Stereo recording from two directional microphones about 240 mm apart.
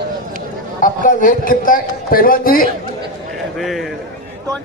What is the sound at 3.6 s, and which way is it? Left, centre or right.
Speech, centre.